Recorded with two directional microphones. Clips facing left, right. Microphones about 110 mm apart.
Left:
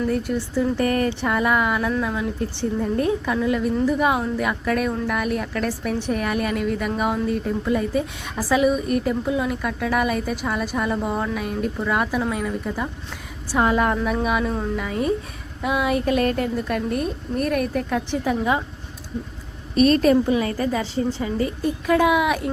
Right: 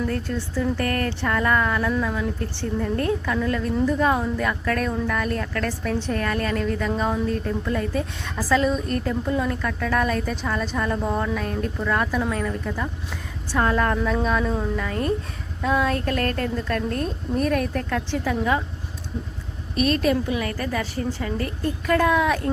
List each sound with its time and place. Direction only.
0.1 s a woman's voice: 15° left (ahead or behind)
19.7 s speech: 35° left (ahead or behind)
20.3 s a woman's voice: 25° left (ahead or behind)